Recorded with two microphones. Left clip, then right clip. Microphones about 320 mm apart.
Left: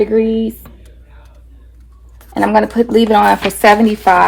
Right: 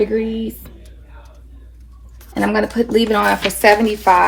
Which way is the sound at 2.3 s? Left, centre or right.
Left.